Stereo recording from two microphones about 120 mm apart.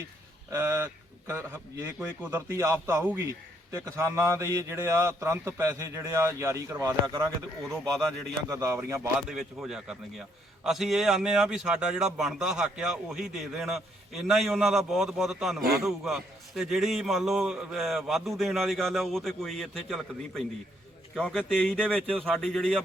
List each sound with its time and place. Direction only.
0.5 s a man's voice: 25° right (ahead or behind)
9.3 s a man's voice: 5° right (ahead or behind)